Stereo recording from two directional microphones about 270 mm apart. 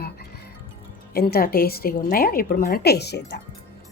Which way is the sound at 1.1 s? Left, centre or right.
Left.